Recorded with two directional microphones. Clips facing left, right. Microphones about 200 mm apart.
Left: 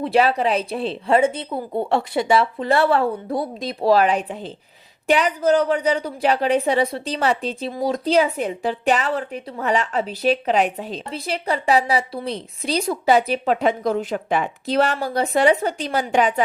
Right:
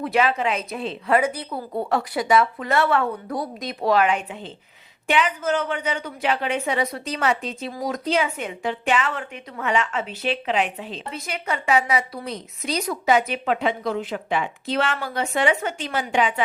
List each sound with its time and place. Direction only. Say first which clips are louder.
0.0 s a woman's voice: left 3 dB; 35° left (ahead or behind)